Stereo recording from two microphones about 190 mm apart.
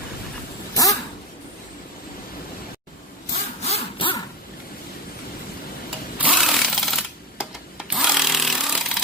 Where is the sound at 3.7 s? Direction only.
25° left (ahead or behind).